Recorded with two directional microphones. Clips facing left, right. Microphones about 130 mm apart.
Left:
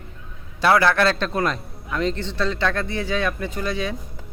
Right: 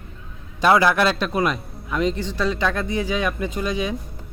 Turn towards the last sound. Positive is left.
turn(degrees=-15)  # may be behind; listen again after turning